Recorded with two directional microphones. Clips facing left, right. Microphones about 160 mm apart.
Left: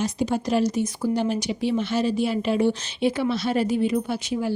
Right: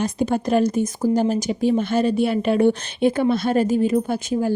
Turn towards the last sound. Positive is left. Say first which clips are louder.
# right 4 dB
turn(degrees=-45)  # may be behind; listen again after turning